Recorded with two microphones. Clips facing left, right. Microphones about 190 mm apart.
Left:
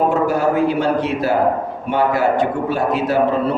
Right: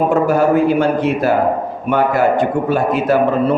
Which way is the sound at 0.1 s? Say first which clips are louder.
Right 4 dB; 50° right (ahead or behind).